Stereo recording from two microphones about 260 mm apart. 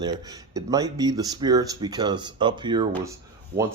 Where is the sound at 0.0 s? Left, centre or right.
Centre.